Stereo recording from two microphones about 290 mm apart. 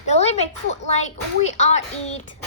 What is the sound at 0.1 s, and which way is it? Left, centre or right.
Speech, left.